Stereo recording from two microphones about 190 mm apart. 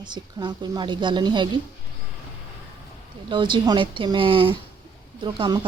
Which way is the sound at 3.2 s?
25° right (ahead or behind).